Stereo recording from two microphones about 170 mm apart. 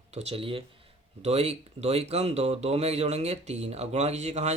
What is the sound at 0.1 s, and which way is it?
Speech, 40° right (ahead or behind).